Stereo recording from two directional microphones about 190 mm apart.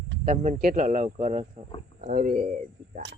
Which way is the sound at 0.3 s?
45° right (ahead or behind).